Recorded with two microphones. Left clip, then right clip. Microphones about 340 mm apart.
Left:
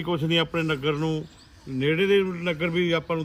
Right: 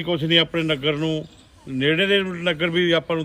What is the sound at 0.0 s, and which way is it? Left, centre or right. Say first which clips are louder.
A man's voice: right 5 dB; centre.